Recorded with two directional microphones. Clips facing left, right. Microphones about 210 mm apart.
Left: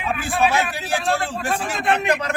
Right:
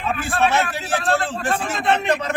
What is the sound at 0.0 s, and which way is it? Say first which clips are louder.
A man's voice: even; centre (ahead or behind).